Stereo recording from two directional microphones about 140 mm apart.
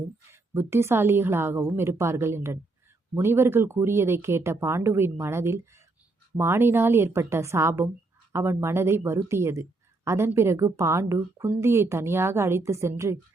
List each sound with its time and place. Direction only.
0.3 s a woman's voice: 15° right (ahead or behind)